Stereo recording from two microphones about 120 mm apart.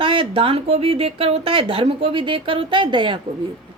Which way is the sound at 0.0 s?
50° right (ahead or behind).